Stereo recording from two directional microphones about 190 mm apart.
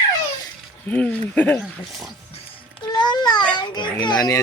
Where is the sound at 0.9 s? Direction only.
5° left (ahead or behind).